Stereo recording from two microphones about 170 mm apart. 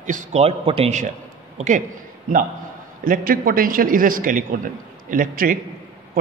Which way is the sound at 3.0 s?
55° right (ahead or behind).